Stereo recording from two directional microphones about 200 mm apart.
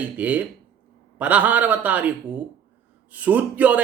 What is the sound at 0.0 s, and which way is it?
Speech, 5° right (ahead or behind).